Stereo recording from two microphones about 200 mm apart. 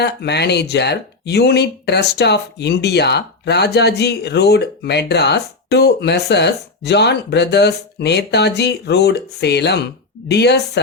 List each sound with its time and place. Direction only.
0.0 s speech: 55° left (ahead or behind)